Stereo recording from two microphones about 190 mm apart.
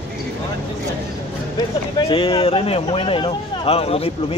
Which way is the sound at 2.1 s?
30° left (ahead or behind).